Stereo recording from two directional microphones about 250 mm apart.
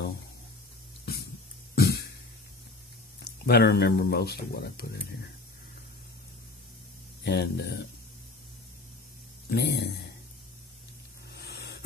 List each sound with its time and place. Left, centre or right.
1.8 s cough: left
3.4 s speech: left
7.2 s speech: left
9.5 s speech: left
11.3 s spray: left